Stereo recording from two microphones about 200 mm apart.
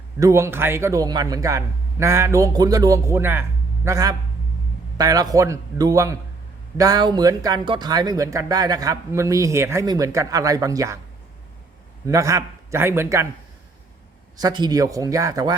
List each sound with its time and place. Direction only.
0.2 s speech: 15° right (ahead or behind)
12.0 s speech: 15° right (ahead or behind)
14.3 s speech: 20° right (ahead or behind)